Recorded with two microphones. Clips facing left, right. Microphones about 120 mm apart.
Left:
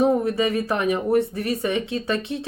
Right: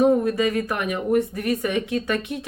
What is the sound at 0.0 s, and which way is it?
Speech, 25° left (ahead or behind).